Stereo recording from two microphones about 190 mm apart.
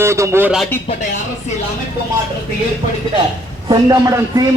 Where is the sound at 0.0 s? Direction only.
15° right (ahead or behind).